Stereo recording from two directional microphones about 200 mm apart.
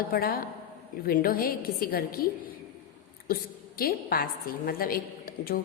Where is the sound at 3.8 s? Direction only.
50° left (ahead or behind).